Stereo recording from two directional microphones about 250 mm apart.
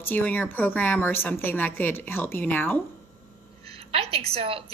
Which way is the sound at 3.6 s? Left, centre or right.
Right.